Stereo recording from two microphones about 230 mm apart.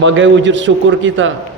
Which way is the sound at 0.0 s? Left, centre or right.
Right.